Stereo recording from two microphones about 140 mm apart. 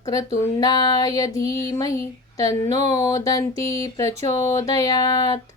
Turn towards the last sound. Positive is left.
turn(degrees=25)  # may be behind; listen again after turning